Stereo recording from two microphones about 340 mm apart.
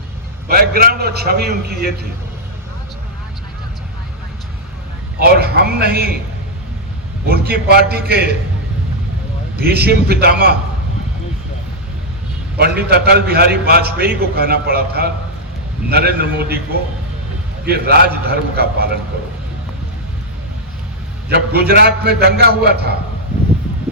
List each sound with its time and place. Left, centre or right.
0.4 s a man's voice: right
5.2 s a man's voice: right
7.3 s a man's voice: right
9.6 s a man's voice: right
12.5 s a man's voice: right
17.7 s a man's voice: right
21.2 s a man's voice: right